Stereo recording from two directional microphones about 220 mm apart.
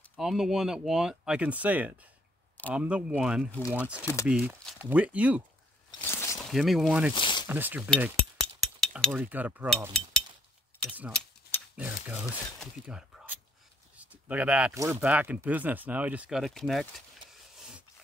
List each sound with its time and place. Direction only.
0.1 s speech: centre (ahead or behind)
4.0 s speech: 10° left (ahead or behind)
4.3 s speech: 5° right (ahead or behind)
5.9 s a sound: 10° left (ahead or behind)
6.5 s speech: centre (ahead or behind)
7.2 s zipper: 20° left (ahead or behind)
7.4 s speech: 10° right (ahead or behind)
8.0 s chink: centre (ahead or behind)
11.1 s speech: 5° left (ahead or behind)
13.9 s zipper: 5° right (ahead or behind)
14.9 s speech: 5° right (ahead or behind)
17.6 s a sound: 5° right (ahead or behind)